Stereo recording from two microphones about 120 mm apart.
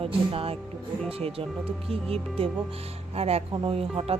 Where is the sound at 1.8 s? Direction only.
55° right (ahead or behind).